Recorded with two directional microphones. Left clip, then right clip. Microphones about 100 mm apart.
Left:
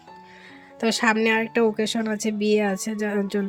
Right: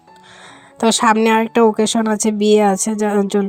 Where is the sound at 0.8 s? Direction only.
50° right (ahead or behind).